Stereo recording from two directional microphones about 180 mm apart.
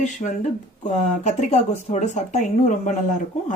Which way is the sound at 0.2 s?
30° left (ahead or behind).